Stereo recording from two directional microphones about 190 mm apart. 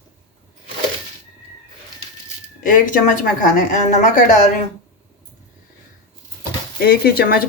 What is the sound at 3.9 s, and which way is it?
Speech, 40° left (ahead or behind).